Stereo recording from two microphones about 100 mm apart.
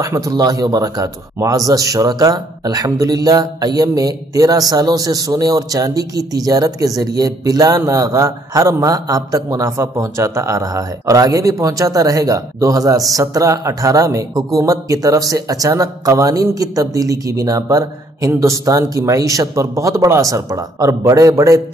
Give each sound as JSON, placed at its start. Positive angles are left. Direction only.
{"t": 0.0, "sound": "speech", "side_deg": -35}